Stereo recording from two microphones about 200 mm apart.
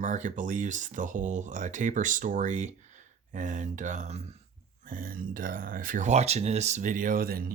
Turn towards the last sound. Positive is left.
turn(degrees=-45)  # may be behind; listen again after turning